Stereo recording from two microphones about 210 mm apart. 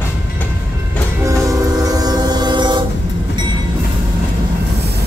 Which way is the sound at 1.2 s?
15° right (ahead or behind).